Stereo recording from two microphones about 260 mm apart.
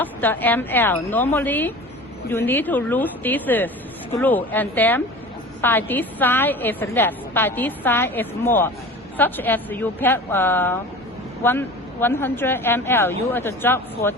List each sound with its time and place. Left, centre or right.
0.0 s a woman's voice: centre